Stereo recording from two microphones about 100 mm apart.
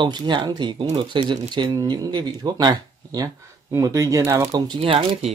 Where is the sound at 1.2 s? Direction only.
50° right (ahead or behind).